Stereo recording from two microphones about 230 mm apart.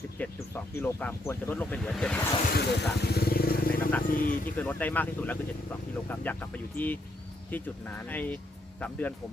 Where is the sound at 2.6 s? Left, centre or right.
Left.